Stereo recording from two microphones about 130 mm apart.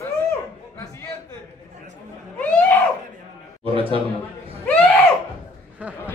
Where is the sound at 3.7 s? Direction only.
45° right (ahead or behind).